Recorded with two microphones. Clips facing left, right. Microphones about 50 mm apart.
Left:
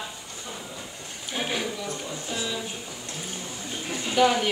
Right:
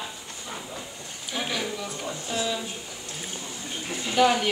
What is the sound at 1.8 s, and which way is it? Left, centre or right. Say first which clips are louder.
Speech: even; centre.